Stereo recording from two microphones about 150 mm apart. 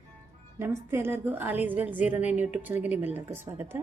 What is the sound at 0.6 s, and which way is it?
A woman's voice, 15° right (ahead or behind).